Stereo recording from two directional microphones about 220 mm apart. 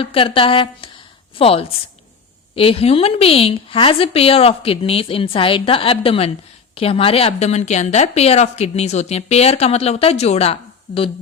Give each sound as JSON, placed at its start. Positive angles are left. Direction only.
{"t": 0.0, "sound": "a woman's voice", "side_deg": 25}